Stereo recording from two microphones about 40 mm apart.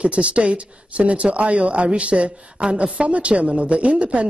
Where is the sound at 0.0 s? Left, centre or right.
Right.